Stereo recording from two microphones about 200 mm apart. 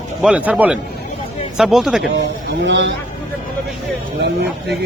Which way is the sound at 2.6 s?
60° right (ahead or behind).